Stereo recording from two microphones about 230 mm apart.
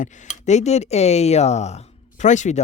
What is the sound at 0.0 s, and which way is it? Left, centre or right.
Speech, left.